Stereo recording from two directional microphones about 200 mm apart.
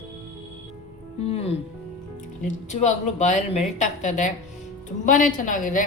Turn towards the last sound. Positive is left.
turn(degrees=40)  # may be behind; listen again after turning